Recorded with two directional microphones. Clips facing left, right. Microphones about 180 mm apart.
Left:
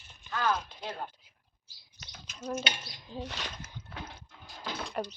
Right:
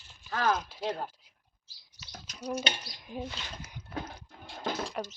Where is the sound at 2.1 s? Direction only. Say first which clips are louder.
Right 1 dB; 40° right (ahead or behind).